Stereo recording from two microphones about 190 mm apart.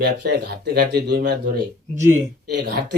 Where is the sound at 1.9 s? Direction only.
40° right (ahead or behind).